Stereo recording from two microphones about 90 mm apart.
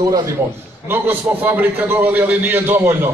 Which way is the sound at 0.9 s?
20° right (ahead or behind).